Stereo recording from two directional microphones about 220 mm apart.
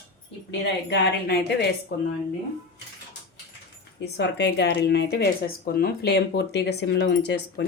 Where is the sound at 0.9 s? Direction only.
50° left (ahead or behind).